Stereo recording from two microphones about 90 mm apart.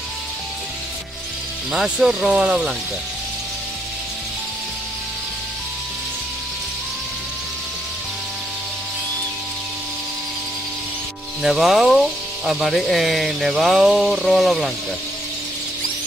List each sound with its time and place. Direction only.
1.7 s speech: 5° right (ahead or behind)
11.4 s speech: centre (ahead or behind)